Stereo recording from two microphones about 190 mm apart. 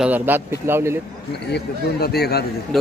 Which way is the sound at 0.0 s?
10° right (ahead or behind).